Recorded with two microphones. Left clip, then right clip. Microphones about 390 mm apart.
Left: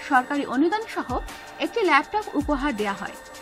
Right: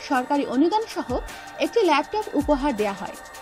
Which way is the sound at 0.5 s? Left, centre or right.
Centre.